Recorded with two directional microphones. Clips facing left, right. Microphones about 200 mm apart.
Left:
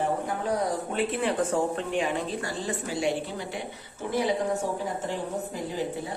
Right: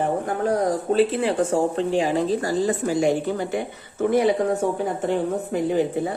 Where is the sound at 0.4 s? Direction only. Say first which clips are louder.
Right 8 dB; 45° right (ahead or behind).